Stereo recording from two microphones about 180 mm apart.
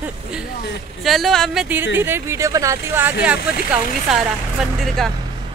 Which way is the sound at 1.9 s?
15° right (ahead or behind).